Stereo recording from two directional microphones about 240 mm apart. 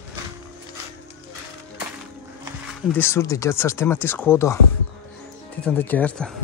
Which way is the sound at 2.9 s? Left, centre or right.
Centre.